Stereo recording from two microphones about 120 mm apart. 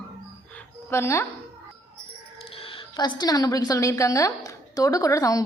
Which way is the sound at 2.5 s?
50° left (ahead or behind).